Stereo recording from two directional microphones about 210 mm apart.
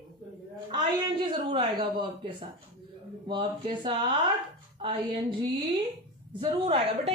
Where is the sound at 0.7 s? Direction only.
25° right (ahead or behind).